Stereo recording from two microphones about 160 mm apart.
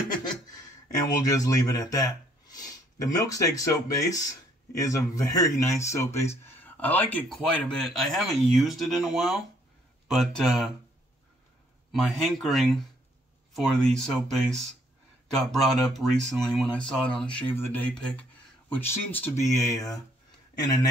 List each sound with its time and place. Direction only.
0.8 s speech: 20° left (ahead or behind); by 10.7 s centre (ahead or behind)
11.9 s speech: centre (ahead or behind); by 20.0 s 20° left (ahead or behind)